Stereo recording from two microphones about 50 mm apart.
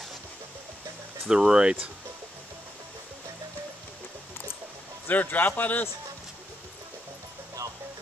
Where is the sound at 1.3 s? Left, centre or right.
Centre.